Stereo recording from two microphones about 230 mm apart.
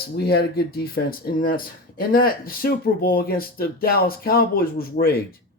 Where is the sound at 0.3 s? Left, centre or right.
Left.